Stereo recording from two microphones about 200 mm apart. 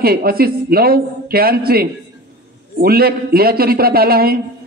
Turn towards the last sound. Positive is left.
turn(degrees=-50)  # may be behind; listen again after turning